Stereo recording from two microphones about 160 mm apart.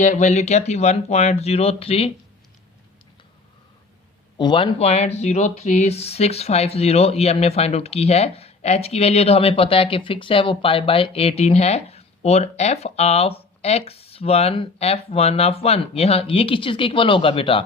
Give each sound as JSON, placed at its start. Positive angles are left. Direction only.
{"t": 0.0, "sound": "speech", "side_deg": 50}
{"t": 4.4, "sound": "speech", "side_deg": 30}